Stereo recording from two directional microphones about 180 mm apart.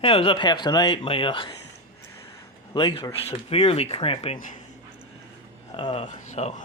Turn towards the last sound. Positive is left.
turn(degrees=40)  # may be behind; listen again after turning